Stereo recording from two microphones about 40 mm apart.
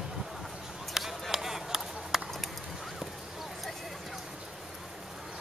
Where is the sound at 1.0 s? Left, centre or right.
Centre.